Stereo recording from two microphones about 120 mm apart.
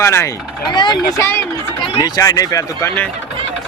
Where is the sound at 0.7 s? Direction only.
40° left (ahead or behind).